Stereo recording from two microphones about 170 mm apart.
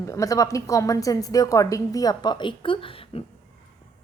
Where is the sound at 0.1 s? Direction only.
20° left (ahead or behind).